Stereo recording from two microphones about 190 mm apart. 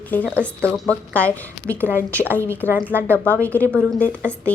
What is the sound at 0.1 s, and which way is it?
A woman's voice, 10° left (ahead or behind).